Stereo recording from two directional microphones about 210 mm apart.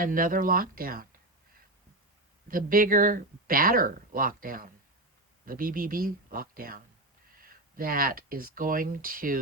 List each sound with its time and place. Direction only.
0.0 s speech: 40° right (ahead or behind)
2.5 s speech: 40° right (ahead or behind)